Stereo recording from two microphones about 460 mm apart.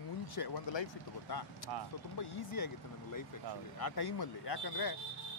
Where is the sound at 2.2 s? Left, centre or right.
Left.